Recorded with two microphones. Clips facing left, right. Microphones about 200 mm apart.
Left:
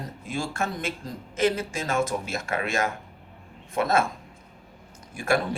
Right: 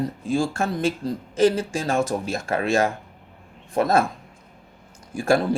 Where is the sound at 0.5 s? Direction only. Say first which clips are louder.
Right 6 dB; 30° right (ahead or behind).